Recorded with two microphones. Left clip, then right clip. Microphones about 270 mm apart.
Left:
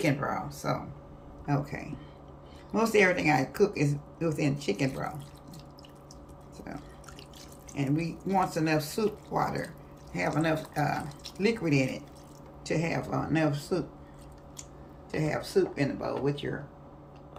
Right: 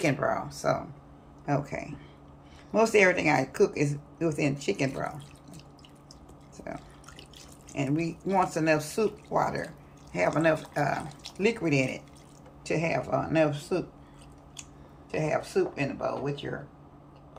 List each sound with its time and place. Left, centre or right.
0.0 s speech: centre
6.7 s speech: centre
15.1 s speech: centre